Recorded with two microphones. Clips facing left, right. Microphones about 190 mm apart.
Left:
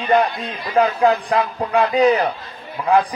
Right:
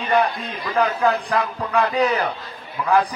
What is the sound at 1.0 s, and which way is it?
A man's voice, 35° left (ahead or behind).